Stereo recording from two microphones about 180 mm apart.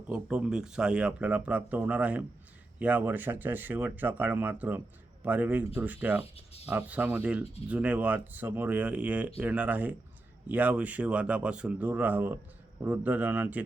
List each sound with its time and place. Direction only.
0.1 s speech: 5° right (ahead or behind)